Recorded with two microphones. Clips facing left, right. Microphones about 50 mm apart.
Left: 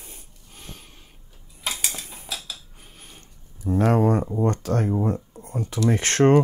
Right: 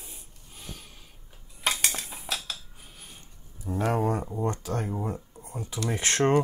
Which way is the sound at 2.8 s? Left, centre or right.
Left.